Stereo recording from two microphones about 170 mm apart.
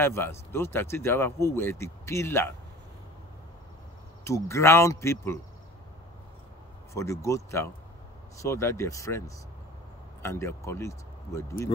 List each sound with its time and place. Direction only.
0.0 s speech: 15° left (ahead or behind)
4.2 s speech: 15° left (ahead or behind)
6.9 s speech: 15° left (ahead or behind)